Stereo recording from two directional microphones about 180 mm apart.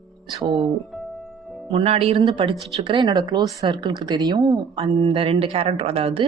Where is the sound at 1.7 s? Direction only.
35° right (ahead or behind).